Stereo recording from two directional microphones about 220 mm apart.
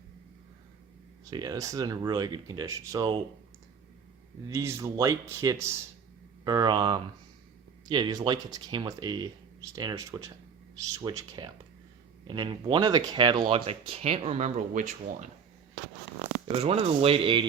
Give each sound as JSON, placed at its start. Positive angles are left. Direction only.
{"t": 1.2, "sound": "speech", "side_deg": -15}
{"t": 4.4, "sound": "speech", "side_deg": -15}
{"t": 16.5, "sound": "speech", "side_deg": -25}